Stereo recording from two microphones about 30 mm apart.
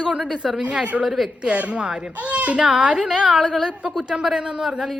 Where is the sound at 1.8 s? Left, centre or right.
Right.